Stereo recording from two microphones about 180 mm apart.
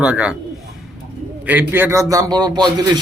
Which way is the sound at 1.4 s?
10° right (ahead or behind).